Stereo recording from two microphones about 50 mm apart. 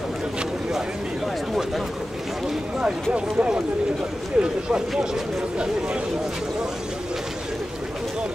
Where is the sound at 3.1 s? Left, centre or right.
Right.